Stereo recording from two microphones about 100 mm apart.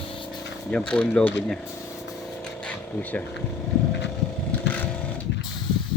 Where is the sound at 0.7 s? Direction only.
10° left (ahead or behind).